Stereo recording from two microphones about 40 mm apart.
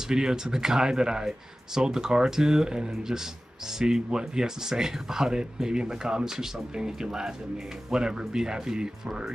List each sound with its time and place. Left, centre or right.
0.1 s speech: centre